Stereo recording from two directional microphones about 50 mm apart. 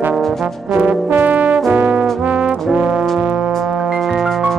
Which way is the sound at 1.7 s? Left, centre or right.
Right.